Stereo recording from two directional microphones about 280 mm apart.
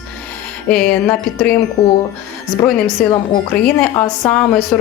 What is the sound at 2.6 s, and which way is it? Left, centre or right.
A woman's voice, centre.